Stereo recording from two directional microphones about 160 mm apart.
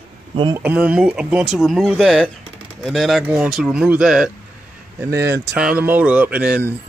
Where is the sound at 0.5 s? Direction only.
10° right (ahead or behind).